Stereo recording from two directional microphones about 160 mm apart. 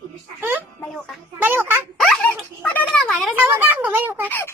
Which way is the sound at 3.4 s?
15° right (ahead or behind).